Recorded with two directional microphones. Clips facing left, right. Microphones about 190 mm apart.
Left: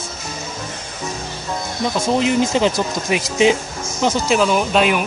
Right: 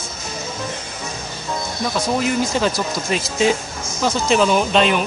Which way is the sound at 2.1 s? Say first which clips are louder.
Left 4 dB; 20° left (ahead or behind).